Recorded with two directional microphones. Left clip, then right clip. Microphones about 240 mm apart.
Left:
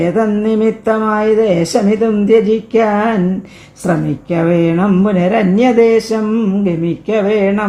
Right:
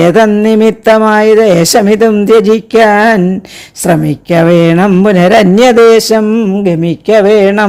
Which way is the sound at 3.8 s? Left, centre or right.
Right.